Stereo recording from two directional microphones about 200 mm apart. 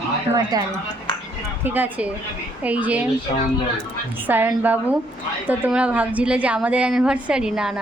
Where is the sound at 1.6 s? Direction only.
10° right (ahead or behind).